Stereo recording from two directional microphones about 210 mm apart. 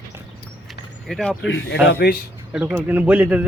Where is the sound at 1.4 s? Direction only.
60° left (ahead or behind).